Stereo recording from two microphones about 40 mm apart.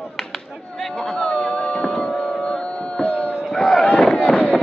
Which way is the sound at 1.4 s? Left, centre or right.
Left.